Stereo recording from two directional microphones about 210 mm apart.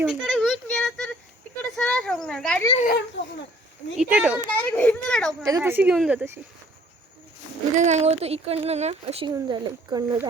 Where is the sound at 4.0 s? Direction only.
5° right (ahead or behind).